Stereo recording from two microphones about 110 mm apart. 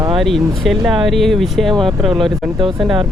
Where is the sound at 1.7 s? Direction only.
50° right (ahead or behind).